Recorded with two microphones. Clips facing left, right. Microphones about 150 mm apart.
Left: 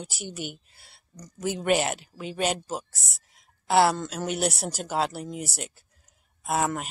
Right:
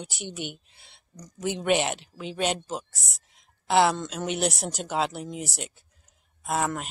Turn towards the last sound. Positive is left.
turn(degrees=5)  # may be behind; listen again after turning